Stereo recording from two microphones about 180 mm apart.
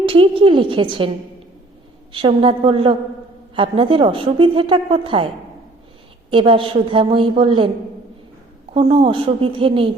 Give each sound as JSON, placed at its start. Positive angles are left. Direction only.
{"t": 0.0, "sound": "a woman's voice", "side_deg": -30}
{"t": 2.1, "sound": "a woman's voice", "side_deg": -30}
{"t": 6.3, "sound": "a woman's voice", "side_deg": -30}
{"t": 8.7, "sound": "a woman's voice", "side_deg": -30}